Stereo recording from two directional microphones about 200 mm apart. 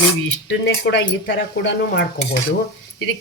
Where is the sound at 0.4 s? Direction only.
60° left (ahead or behind).